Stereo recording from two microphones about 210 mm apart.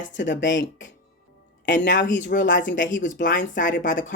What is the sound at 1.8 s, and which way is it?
Speech, 40° left (ahead or behind).